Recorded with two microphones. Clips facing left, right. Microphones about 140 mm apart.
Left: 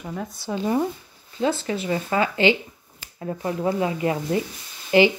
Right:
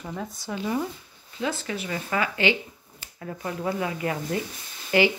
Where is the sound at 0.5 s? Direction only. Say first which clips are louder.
Left 5 dB; 35° left (ahead or behind).